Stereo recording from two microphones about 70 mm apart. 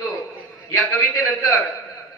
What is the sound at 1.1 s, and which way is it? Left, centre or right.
Speech, left.